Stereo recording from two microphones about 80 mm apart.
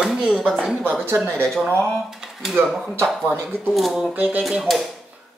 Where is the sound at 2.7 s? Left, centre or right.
Centre.